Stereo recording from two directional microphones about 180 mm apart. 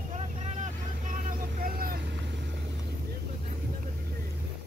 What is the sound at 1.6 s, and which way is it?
Vehicle, 55° right (ahead or behind).